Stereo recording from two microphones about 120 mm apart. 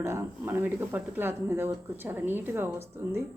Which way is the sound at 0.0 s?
20° right (ahead or behind).